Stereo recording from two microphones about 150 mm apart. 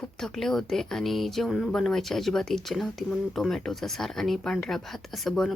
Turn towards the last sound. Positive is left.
turn(degrees=0)  # may be behind; listen again after turning